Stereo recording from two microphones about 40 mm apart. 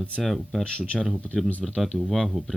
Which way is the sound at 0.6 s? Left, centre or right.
Left.